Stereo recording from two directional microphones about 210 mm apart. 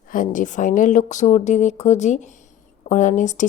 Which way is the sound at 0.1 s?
40° left (ahead or behind).